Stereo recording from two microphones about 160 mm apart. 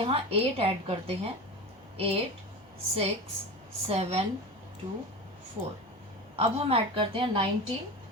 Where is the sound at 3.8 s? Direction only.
40° right (ahead or behind).